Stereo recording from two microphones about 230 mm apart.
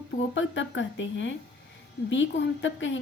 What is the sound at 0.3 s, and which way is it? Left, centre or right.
A woman's voice, left.